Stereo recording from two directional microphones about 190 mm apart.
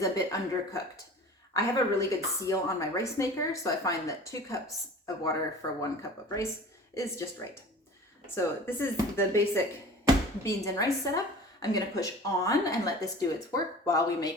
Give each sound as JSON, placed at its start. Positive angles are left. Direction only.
{"t": 0.0, "sound": "speech", "side_deg": 15}
{"t": 8.4, "sound": "speech", "side_deg": 10}
{"t": 10.4, "sound": "speech", "side_deg": 15}